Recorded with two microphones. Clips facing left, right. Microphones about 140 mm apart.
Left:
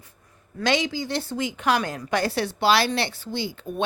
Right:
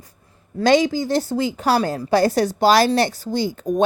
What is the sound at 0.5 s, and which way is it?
A woman's voice, 40° right (ahead or behind).